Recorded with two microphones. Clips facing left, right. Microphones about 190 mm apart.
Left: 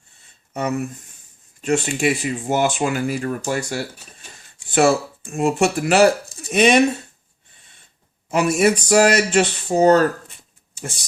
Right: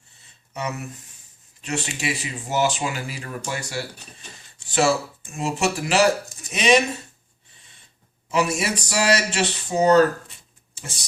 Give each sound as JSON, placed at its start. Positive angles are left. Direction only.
{"t": 0.5, "sound": "speech", "side_deg": 50}
{"t": 8.3, "sound": "speech", "side_deg": 55}